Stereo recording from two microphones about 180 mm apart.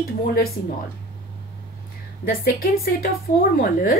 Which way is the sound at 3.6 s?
50° left (ahead or behind).